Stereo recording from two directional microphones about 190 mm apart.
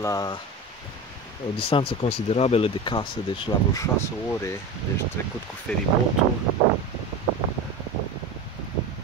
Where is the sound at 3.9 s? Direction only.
15° left (ahead or behind).